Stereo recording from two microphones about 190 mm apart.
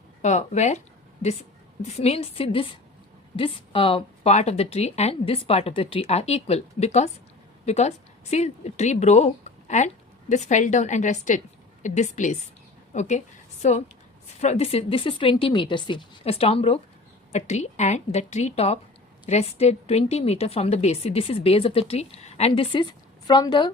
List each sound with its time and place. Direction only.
0.2 s speech: 40° left (ahead or behind)
2.0 s a woman's voice: 35° left (ahead or behind)